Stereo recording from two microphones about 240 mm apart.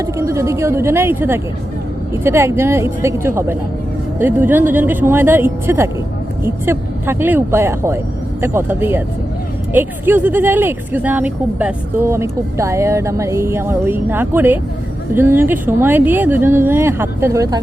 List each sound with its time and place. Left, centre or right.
0.0 s speech: centre